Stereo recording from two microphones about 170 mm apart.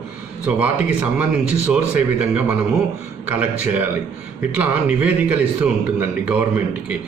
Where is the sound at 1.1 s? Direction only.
5° right (ahead or behind).